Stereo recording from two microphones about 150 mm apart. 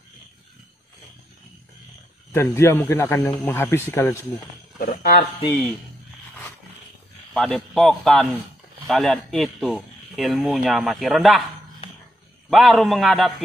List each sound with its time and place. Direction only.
2.3 s speech: 20° left (ahead or behind)
4.7 s speech: 85° left
7.3 s speech: 5° left (ahead or behind)
12.4 s speech: centre (ahead or behind)